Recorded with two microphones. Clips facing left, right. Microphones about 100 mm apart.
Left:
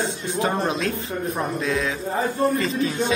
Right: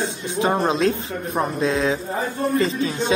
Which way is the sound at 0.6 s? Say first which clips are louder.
Right 4 dB; 30° right (ahead or behind).